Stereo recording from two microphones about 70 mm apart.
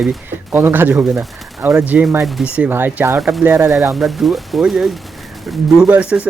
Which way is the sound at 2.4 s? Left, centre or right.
Centre.